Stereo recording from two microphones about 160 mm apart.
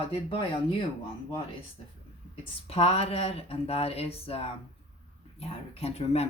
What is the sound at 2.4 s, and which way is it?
Speech, 40° left (ahead or behind).